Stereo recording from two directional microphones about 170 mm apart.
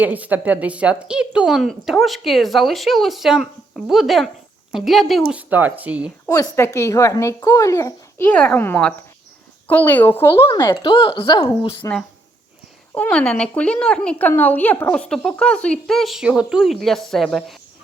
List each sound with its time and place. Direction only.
0.0 s speech: 10° right (ahead or behind)
6.2 s speech: 20° left (ahead or behind)
8.3 s a woman's voice: 5° left (ahead or behind)
10.5 s speech: 25° left (ahead or behind)
11.8 s a woman's voice: 10° left (ahead or behind)